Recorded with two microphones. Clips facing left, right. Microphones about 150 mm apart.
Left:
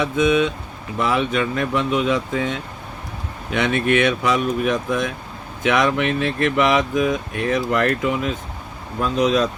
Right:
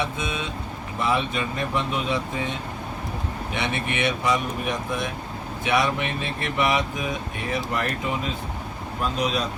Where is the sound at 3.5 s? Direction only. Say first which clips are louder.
Left 10 dB; 90° left.